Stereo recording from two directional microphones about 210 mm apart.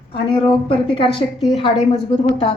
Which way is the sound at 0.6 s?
25° left (ahead or behind).